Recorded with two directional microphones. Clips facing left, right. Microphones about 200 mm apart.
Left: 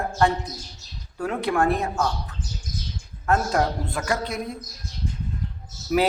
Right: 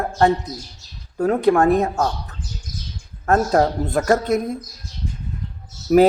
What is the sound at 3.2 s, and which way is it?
Speech, 40° right (ahead or behind).